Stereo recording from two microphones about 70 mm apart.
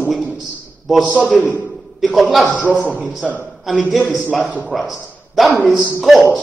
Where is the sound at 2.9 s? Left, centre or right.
Centre.